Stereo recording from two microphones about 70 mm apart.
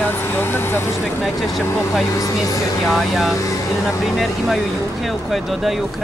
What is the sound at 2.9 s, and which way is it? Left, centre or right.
Speech, centre.